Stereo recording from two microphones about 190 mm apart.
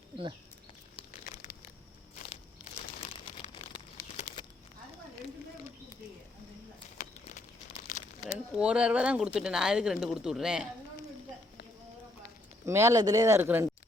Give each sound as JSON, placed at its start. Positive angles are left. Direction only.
{"t": 3.1, "sound": "a sound", "side_deg": 30}
{"t": 7.7, "sound": "crumpling", "side_deg": 40}
{"t": 8.5, "sound": "speech", "side_deg": -5}
{"t": 12.6, "sound": "speech", "side_deg": -15}